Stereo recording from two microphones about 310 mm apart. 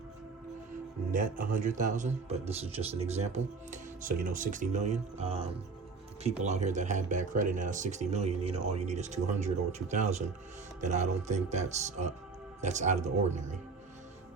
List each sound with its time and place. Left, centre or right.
1.1 s speech: right